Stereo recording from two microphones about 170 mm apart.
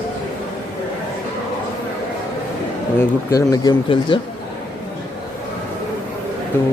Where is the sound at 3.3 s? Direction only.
20° left (ahead or behind).